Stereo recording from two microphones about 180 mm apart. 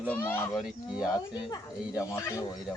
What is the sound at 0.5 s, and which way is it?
Speech, 5° right (ahead or behind).